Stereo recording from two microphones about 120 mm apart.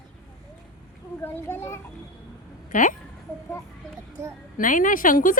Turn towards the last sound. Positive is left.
turn(degrees=90)